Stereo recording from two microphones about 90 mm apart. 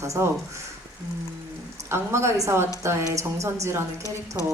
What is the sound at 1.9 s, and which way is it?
A woman's voice, 30° right (ahead or behind).